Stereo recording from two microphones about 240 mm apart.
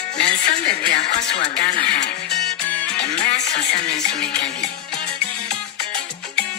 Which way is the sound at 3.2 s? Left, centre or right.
Left.